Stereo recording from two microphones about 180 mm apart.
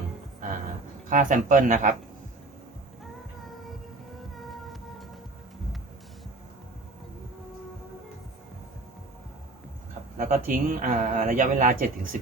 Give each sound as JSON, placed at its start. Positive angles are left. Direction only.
{"t": 1.1, "sound": "speech", "side_deg": -45}
{"t": 4.2, "sound": "music", "side_deg": 0}
{"t": 10.2, "sound": "speech", "side_deg": -50}